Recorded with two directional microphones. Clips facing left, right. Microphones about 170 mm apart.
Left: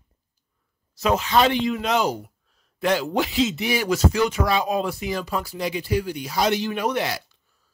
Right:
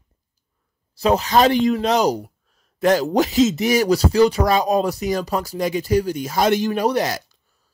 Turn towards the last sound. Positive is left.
turn(degrees=-40)  # may be behind; listen again after turning